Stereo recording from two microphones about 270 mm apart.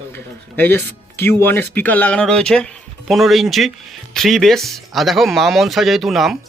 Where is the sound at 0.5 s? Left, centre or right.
Centre.